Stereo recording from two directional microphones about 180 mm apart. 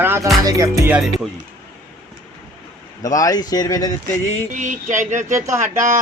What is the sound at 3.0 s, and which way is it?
Speech, 20° left (ahead or behind).